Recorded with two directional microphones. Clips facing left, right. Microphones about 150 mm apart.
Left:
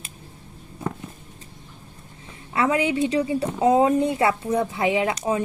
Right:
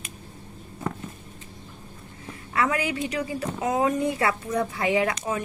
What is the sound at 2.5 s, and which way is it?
A woman's voice, 25° left (ahead or behind).